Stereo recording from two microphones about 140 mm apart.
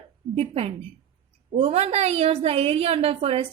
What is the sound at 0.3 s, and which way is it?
A woman's voice, 45° right (ahead or behind).